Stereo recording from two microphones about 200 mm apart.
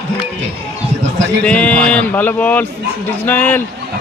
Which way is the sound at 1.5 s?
5° left (ahead or behind).